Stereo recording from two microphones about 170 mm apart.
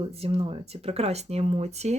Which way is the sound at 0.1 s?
35° right (ahead or behind).